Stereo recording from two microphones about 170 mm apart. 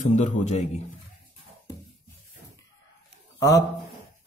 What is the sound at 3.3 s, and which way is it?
Speech, 20° left (ahead or behind).